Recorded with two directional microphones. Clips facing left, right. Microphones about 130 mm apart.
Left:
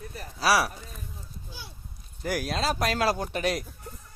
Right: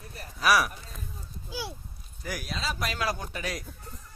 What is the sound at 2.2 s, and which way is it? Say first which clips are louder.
Speech: left 7 dB; 65° left (ahead or behind).